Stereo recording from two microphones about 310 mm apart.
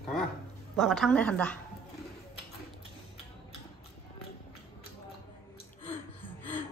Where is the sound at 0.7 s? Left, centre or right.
Centre.